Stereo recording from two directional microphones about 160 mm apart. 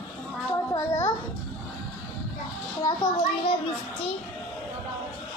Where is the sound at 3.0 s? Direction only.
25° left (ahead or behind).